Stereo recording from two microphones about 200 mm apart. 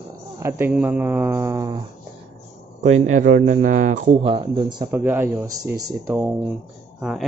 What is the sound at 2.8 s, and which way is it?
A man's voice, 35° right (ahead or behind).